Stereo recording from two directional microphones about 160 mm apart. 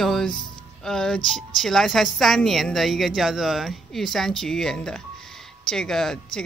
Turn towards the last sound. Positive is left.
turn(degrees=5)  # may be behind; listen again after turning